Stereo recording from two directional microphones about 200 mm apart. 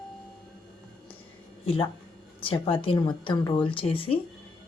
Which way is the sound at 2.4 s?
25° left (ahead or behind).